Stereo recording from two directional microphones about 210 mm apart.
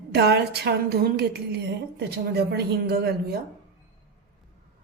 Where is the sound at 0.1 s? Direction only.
50° right (ahead or behind).